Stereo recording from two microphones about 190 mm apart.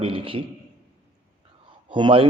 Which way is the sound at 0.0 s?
30° right (ahead or behind).